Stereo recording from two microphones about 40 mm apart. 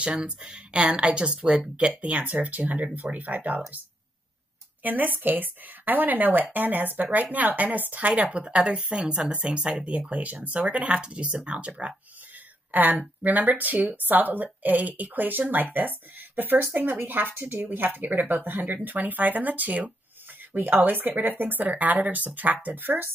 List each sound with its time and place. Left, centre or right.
0.1 s speech: right
4.8 s a woman's voice: right
8.2 s speech: right
10.9 s speech: right
13.2 s a woman's voice: right
20.5 s a woman's voice: right